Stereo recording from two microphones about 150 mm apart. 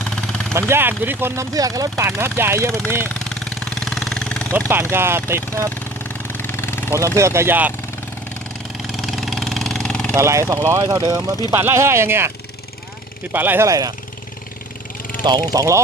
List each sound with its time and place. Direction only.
0.0 s vehicle: 5° left (ahead or behind)
0.5 s speech: 15° right (ahead or behind)
3.2 s vehicle: 5° left (ahead or behind)
4.5 s speech: 15° right (ahead or behind)
6.0 s vehicle: 15° left (ahead or behind)
7.2 s speech: 20° right (ahead or behind)
8.9 s vehicle: centre (ahead or behind)
10.2 s speech: 20° right (ahead or behind)
13.3 s speech: 15° right (ahead or behind)
15.2 s speech: 25° right (ahead or behind)